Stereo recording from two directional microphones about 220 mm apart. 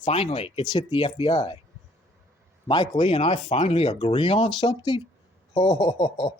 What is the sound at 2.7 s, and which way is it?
Speech, 20° left (ahead or behind).